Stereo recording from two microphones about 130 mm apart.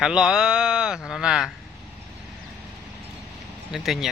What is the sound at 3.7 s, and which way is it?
Speech, centre (ahead or behind).